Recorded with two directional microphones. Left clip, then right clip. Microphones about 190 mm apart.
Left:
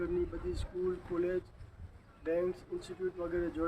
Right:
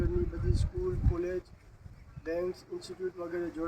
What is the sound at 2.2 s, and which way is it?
Speech, centre (ahead or behind).